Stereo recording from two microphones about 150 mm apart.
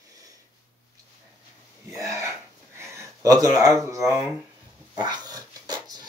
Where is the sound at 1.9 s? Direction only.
20° right (ahead or behind).